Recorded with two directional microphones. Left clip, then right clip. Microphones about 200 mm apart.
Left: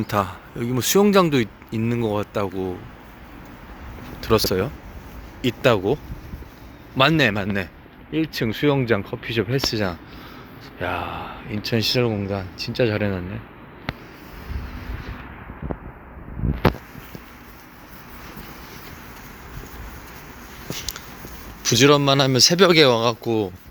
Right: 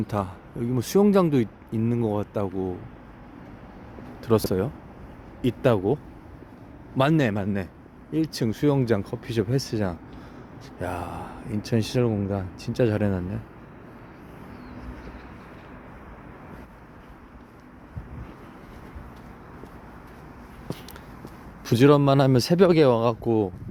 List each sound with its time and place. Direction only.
0.1 s speech: centre (ahead or behind)
4.2 s speech: 15° right (ahead or behind)
21.6 s speech: 25° right (ahead or behind)
22.5 s speech: 15° right (ahead or behind)